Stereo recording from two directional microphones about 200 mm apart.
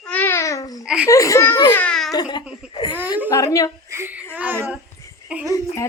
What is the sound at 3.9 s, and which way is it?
A woman's voice, 10° right (ahead or behind).